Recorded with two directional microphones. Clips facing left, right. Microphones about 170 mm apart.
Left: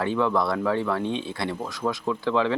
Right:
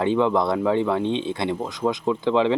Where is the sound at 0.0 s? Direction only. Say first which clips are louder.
Right 4 dB; 20° right (ahead or behind).